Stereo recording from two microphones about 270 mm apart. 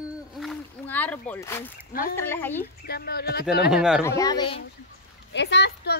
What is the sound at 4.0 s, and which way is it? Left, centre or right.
Speech, centre.